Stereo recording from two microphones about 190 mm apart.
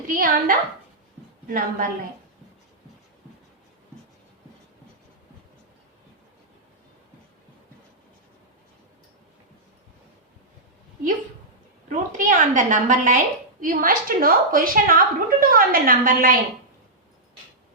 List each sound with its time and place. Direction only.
0.1 s a woman's voice: 50° right (ahead or behind)
11.9 s a woman's voice: 45° right (ahead or behind)